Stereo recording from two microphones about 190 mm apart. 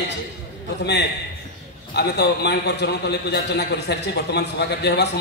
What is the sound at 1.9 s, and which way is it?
A man's voice, 60° left (ahead or behind).